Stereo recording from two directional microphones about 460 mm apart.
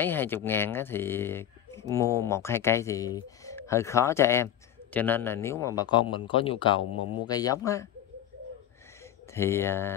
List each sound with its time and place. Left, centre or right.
0.0 s a man's voice: centre
6.8 s speech: left
7.2 s a man's voice: centre
9.3 s speech: centre